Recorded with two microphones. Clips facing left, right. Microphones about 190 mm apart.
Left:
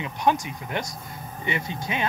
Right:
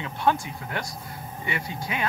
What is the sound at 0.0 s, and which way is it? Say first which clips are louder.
Speech: left 1 dB; 15° left (ahead or behind).